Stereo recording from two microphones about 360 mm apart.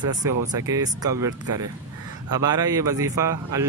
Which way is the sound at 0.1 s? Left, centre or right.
Centre.